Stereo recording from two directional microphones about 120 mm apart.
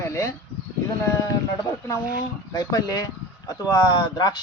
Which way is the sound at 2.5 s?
30° left (ahead or behind).